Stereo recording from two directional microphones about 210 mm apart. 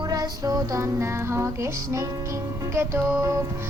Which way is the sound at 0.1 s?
20° right (ahead or behind).